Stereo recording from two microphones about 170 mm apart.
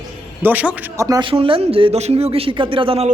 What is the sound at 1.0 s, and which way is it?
Speech, 20° right (ahead or behind).